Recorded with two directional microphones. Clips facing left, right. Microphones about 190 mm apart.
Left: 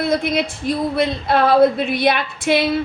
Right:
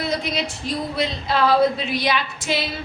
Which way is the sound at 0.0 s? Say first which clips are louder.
Left 6 dB; 55° left (ahead or behind).